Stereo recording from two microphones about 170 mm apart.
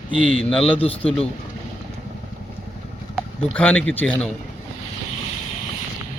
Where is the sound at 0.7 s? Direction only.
35° left (ahead or behind).